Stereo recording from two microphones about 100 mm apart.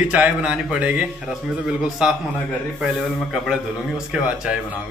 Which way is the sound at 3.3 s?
5° right (ahead or behind).